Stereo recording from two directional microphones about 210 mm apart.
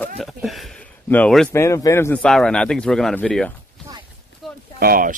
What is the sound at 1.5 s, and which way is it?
Speech, 15° left (ahead or behind).